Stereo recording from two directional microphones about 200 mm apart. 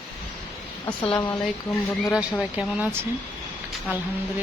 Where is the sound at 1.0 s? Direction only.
25° left (ahead or behind).